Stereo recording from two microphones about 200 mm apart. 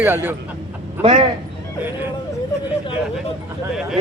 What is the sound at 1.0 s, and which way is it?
Speech, 30° right (ahead or behind).